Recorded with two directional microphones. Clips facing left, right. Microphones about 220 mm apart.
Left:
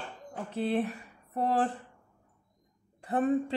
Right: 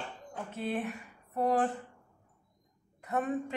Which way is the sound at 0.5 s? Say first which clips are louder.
Left 5 dB; 35° left (ahead or behind).